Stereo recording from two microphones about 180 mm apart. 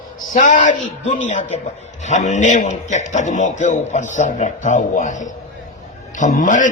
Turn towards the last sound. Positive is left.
turn(degrees=45)  # may be behind; listen again after turning